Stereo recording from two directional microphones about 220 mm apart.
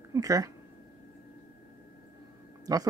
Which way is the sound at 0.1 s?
15° right (ahead or behind).